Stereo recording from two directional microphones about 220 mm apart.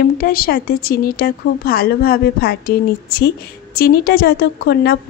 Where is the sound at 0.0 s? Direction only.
40° left (ahead or behind).